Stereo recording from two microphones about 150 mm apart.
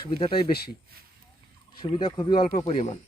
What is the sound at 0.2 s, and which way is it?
Speech, 40° left (ahead or behind).